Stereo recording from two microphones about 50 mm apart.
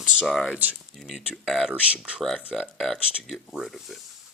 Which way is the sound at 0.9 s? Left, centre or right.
Centre.